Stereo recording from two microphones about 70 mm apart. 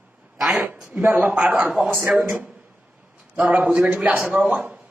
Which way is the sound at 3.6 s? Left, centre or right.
Centre.